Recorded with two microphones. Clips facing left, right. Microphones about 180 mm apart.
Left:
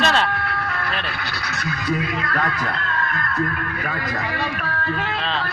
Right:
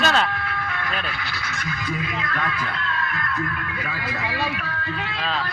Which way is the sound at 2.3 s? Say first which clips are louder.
Left 4 dB; 40° left (ahead or behind).